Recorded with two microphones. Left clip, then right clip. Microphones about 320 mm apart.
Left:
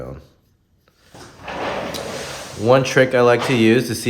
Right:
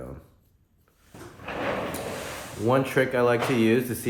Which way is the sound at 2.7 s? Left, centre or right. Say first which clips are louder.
Left 9 dB; left.